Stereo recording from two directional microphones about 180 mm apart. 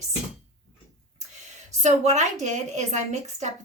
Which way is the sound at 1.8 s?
40° right (ahead or behind).